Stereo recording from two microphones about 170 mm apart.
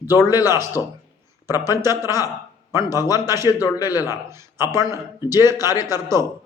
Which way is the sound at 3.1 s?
15° right (ahead or behind).